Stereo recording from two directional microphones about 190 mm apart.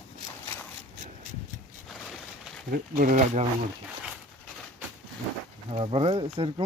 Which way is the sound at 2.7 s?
45° right (ahead or behind).